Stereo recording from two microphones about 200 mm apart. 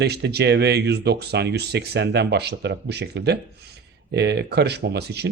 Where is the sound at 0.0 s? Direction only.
55° right (ahead or behind).